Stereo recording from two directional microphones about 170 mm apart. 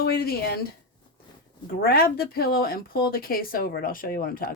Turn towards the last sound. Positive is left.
turn(degrees=60)  # may be behind; listen again after turning